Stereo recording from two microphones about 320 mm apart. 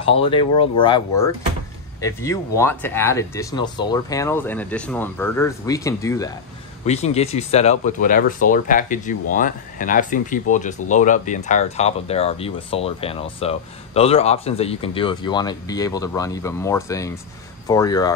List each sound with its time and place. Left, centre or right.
0.0 s speech: centre